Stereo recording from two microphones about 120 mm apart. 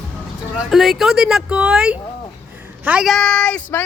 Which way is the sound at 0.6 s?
Centre (ahead or behind).